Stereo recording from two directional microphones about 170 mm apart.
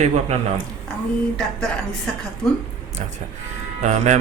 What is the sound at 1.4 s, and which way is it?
Speech, 5° left (ahead or behind).